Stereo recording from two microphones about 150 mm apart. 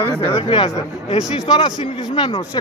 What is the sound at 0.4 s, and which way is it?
Speech, 35° left (ahead or behind).